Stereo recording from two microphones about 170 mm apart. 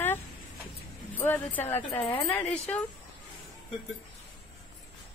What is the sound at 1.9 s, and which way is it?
Speech, 25° left (ahead or behind).